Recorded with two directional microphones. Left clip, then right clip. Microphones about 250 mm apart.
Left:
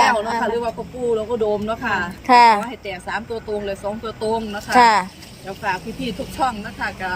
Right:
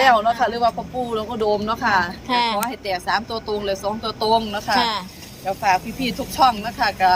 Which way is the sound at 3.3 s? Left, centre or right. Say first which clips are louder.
Right 1 dB; centre.